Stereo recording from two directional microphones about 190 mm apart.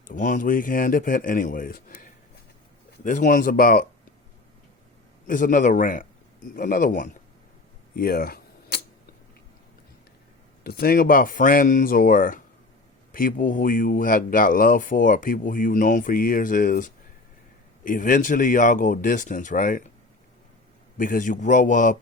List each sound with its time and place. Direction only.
0.1 s speech: 45° left (ahead or behind)
5.2 s speech: 45° left (ahead or behind)
7.9 s camera: 50° left (ahead or behind)
10.6 s speech: 55° left (ahead or behind)
21.0 s speech: 45° left (ahead or behind)